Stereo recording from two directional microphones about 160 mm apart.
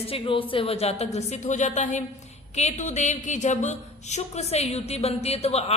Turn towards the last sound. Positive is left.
turn(degrees=40)  # may be behind; listen again after turning